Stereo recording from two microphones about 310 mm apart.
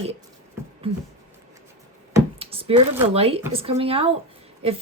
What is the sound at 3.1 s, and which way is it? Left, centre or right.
A woman's voice, centre.